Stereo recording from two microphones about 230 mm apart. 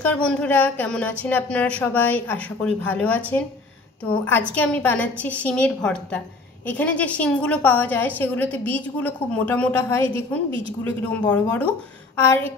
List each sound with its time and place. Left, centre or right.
0.0 s a woman's voice: centre